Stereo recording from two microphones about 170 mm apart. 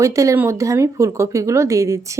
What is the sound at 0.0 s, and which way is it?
Speech, 20° right (ahead or behind).